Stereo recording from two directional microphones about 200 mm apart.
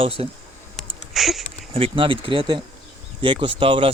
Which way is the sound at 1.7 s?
25° right (ahead or behind).